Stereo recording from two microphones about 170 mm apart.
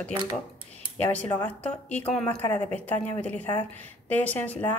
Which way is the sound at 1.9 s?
5° left (ahead or behind).